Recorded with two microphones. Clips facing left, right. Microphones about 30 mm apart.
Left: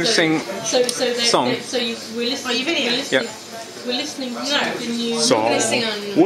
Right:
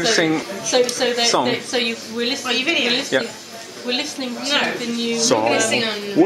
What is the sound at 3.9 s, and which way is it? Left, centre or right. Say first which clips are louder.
Speech: right 1 dB; right.